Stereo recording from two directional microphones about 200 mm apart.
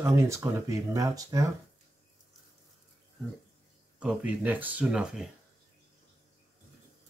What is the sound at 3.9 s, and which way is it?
Speech, 5° right (ahead or behind).